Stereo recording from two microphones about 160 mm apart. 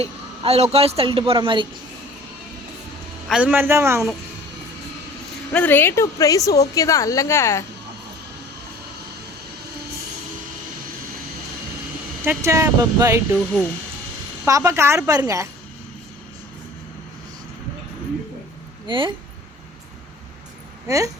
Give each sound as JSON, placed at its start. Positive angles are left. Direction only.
{"t": 0.0, "sound": "a woman's voice", "side_deg": -40}
{"t": 3.2, "sound": "a man's voice", "side_deg": -5}
{"t": 5.5, "sound": "a woman's voice", "side_deg": 10}
{"t": 12.2, "sound": "speech", "side_deg": -15}
{"t": 13.3, "sound": "speech", "side_deg": 5}
{"t": 14.4, "sound": "speech", "side_deg": -20}
{"t": 18.9, "sound": "a woman's voice", "side_deg": -30}
{"t": 20.8, "sound": "speech", "side_deg": -20}